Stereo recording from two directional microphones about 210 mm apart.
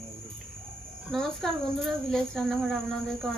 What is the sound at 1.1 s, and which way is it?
Speech, centre (ahead or behind).